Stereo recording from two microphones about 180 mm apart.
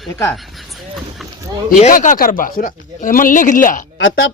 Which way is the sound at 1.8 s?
45° left (ahead or behind).